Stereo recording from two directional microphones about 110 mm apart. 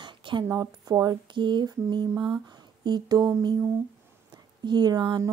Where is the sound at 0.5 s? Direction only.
35° right (ahead or behind).